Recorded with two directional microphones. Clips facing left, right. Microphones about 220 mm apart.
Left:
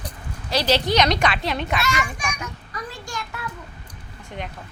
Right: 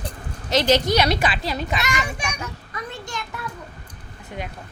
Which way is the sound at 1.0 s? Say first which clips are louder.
Left 1 dB; 5° right (ahead or behind).